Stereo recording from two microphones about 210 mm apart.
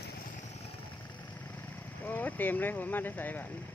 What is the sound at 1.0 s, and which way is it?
Vehicle, 10° left (ahead or behind).